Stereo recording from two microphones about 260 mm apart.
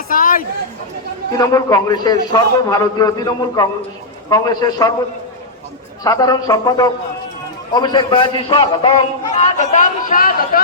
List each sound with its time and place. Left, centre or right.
0.1 s chatter: left
1.3 s a man's voice: centre
6.0 s a man's voice: centre; by 10.6 s left